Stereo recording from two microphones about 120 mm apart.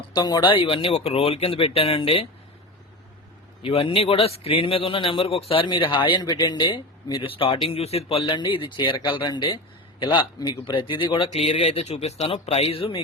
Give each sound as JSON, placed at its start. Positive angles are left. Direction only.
{"t": 0.1, "sound": "speech", "side_deg": 35}
{"t": 0.6, "sound": "a man's voice", "side_deg": 50}
{"t": 3.6, "sound": "a man's voice", "side_deg": 50}
{"t": 5.6, "sound": "a man's voice", "side_deg": 40}
{"t": 8.4, "sound": "a man's voice", "side_deg": 40}
{"t": 11.3, "sound": "speech", "side_deg": 60}